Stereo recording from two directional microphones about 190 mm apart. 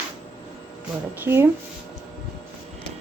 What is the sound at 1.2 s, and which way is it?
Speech, 10° right (ahead or behind).